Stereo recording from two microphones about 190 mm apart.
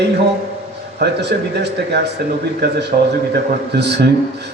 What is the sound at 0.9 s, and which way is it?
A man's voice, 60° right (ahead or behind).